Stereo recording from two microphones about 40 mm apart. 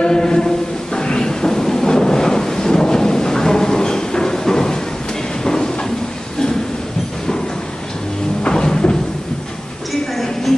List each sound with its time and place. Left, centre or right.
0.0 s a sound: centre
0.9 s thunder: centre
5.4 s train: centre
8.5 s cupboard open or close: left
10.1 s music: centre